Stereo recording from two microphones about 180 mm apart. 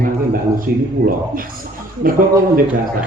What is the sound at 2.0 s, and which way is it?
Speech, 50° right (ahead or behind).